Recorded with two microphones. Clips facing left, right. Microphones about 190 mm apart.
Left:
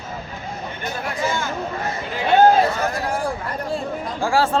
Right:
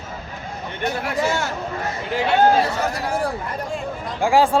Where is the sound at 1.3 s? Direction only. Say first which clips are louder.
Right 1 dB; 75° right (ahead or behind).